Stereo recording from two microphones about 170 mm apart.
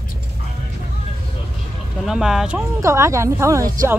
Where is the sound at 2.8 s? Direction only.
15° right (ahead or behind).